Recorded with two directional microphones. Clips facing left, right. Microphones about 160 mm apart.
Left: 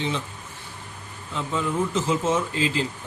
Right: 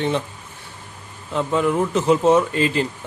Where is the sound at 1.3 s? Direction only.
65° right (ahead or behind).